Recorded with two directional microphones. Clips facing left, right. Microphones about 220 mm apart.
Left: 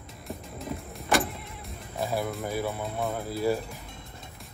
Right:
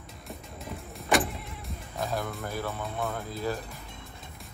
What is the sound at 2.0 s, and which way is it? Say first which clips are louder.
Music: left 3 dB; 15° left (ahead or behind).